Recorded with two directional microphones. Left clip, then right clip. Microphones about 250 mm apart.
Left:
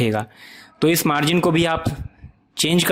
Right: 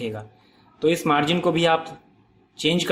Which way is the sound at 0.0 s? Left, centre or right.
Left.